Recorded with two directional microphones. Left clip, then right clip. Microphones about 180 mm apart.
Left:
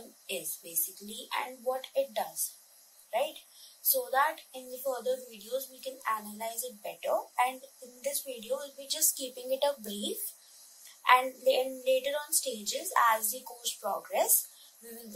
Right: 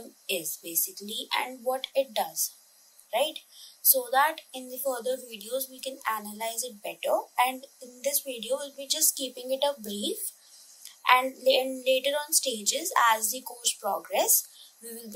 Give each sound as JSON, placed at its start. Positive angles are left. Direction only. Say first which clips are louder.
{"t": 1.0, "sound": "a woman's voice", "louder": "right 5 dB", "side_deg": -35}
{"t": 3.8, "sound": "a woman's voice", "louder": "right 4 dB", "side_deg": -35}